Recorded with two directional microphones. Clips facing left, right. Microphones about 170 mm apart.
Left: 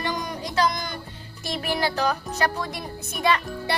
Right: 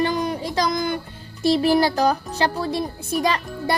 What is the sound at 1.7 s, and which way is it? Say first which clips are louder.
Speech: right 6 dB; 40° right (ahead or behind).